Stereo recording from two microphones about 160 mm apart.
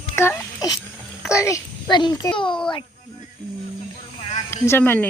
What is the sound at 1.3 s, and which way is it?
A child's voice, 20° left (ahead or behind).